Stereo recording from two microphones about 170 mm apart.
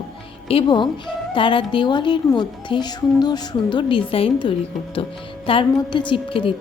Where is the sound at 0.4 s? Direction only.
30° left (ahead or behind).